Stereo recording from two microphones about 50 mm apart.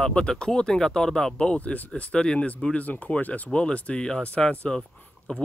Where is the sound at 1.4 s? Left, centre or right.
Left.